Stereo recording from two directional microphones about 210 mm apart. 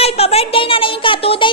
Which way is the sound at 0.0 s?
30° left (ahead or behind).